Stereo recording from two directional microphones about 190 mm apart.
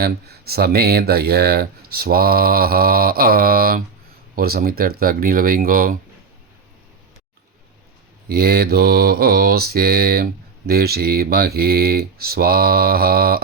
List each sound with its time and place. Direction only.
0.0 s speech: 55° right (ahead or behind)
8.3 s speech: 55° right (ahead or behind)